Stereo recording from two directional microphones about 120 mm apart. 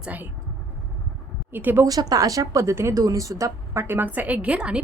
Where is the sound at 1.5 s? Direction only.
15° right (ahead or behind).